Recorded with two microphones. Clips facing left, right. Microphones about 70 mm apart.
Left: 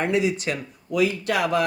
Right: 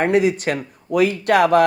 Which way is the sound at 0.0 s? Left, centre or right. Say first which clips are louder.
Right 6 dB; right.